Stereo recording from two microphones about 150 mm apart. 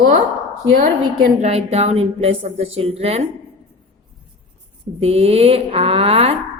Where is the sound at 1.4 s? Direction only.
45° right (ahead or behind).